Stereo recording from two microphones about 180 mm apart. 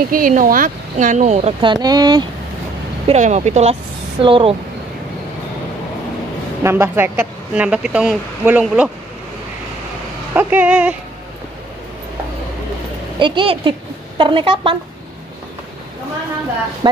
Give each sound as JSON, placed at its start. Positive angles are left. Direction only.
{"t": 0.1, "sound": "speech", "side_deg": -50}
{"t": 1.6, "sound": "speech", "side_deg": -25}
{"t": 3.1, "sound": "speech", "side_deg": -40}
{"t": 4.2, "sound": "speech", "side_deg": -30}
{"t": 6.6, "sound": "speech", "side_deg": -15}
{"t": 10.3, "sound": "speech", "side_deg": -10}
{"t": 13.2, "sound": "speech", "side_deg": -25}
{"t": 16.8, "sound": "speech", "side_deg": -25}